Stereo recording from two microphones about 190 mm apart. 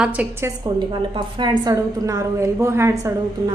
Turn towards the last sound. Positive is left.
turn(degrees=-15)  # may be behind; listen again after turning